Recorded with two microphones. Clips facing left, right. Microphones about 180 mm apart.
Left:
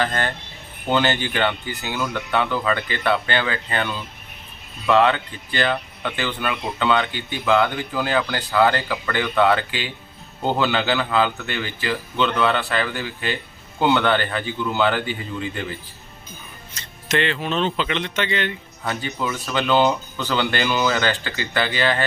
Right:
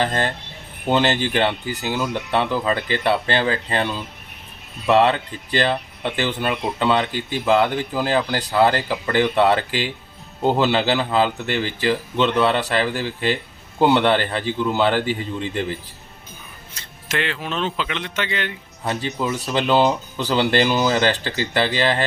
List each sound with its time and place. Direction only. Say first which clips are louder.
0.0 s speech: right 2 dB; 30° right (ahead or behind)
16.7 s speech: left 3 dB; 5° right (ahead or behind)
18.9 s speech: right 2 dB; 35° right (ahead or behind)